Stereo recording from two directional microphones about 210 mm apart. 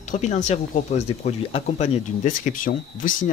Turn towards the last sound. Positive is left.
turn(degrees=40)  # may be behind; listen again after turning